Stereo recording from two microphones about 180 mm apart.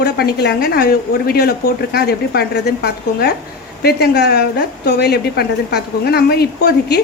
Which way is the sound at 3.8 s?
65° left (ahead or behind).